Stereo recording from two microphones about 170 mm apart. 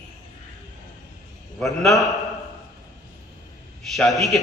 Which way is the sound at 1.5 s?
Centre (ahead or behind).